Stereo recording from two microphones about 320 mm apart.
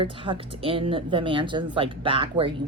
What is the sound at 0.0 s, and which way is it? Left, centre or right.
Speech, centre.